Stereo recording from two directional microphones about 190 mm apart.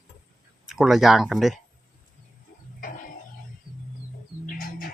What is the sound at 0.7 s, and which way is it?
Speech, centre (ahead or behind).